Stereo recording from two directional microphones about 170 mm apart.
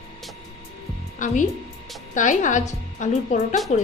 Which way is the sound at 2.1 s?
45° left (ahead or behind).